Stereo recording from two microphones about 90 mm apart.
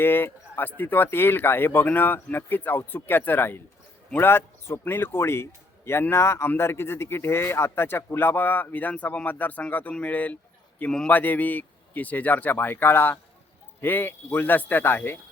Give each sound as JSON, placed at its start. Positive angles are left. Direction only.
{"t": 0.0, "sound": "speech", "side_deg": 25}